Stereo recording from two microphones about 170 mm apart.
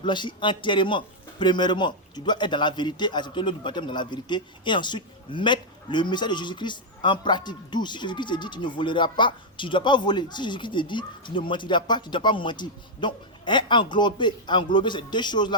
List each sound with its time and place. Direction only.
0.0 s a man's voice: 25° left (ahead or behind)